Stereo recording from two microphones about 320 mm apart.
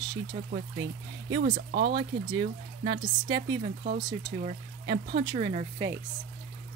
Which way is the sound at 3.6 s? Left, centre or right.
Right.